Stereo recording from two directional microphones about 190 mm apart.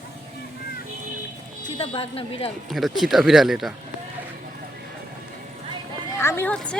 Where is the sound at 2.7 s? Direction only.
Centre (ahead or behind).